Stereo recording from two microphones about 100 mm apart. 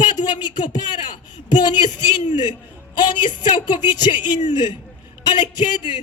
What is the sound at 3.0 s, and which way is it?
Speech, 50° left (ahead or behind).